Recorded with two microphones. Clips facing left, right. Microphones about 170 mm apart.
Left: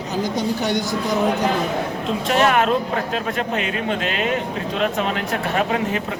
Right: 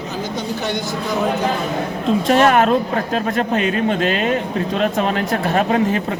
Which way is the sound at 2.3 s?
40° right (ahead or behind).